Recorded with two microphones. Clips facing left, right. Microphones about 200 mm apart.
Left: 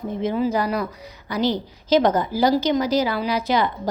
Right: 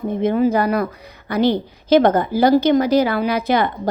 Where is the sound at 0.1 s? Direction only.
55° right (ahead or behind).